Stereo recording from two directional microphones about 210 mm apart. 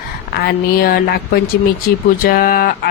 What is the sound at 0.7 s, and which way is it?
Speech, 45° left (ahead or behind).